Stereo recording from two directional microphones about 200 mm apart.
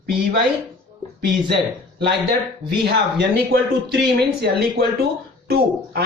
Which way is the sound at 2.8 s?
55° right (ahead or behind).